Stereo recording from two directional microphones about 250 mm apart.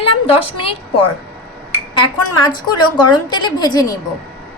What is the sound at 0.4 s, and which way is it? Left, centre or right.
Speech, left.